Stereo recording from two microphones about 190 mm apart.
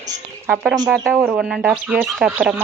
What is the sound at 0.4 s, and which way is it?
Speech, 5° right (ahead or behind).